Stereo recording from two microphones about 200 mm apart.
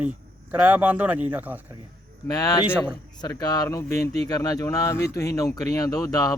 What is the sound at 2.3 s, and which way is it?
Speech, 20° left (ahead or behind).